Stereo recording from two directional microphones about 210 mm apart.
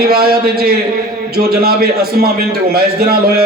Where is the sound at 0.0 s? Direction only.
45° right (ahead or behind).